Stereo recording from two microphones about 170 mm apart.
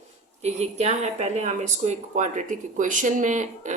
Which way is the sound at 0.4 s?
40° right (ahead or behind).